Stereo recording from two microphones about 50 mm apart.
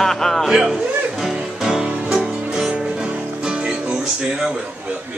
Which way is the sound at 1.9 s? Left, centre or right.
Right.